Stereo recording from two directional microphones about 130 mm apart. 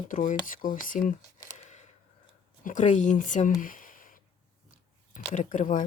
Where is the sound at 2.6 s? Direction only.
75° left (ahead or behind).